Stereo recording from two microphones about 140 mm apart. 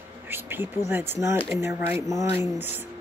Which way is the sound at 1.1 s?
20° right (ahead or behind).